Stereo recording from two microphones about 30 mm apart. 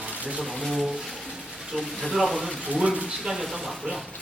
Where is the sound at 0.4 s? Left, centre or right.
Centre.